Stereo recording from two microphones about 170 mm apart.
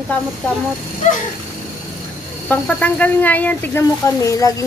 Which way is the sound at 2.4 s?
10° left (ahead or behind).